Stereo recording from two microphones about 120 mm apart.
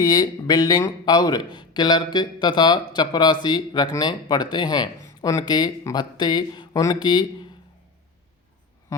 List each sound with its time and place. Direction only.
0.0 s a man's voice: 30° left (ahead or behind)